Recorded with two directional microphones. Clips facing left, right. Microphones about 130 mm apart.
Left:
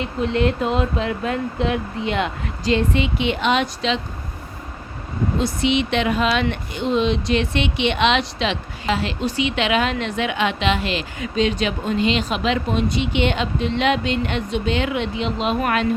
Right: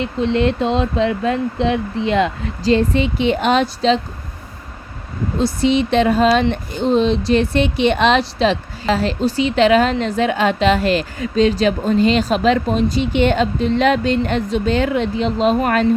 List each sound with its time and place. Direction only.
0.0 s a woman's voice: 30° right (ahead or behind)
5.4 s a woman's voice: 35° right (ahead or behind)